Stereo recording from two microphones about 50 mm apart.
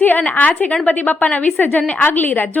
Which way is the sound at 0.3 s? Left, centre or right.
Left.